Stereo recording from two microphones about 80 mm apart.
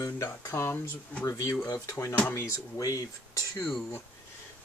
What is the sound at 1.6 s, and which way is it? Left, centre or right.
Speech, left.